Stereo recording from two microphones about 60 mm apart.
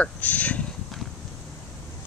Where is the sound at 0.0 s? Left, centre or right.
Left.